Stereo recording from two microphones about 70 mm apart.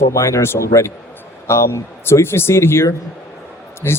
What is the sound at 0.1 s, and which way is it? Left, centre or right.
A man's voice, left.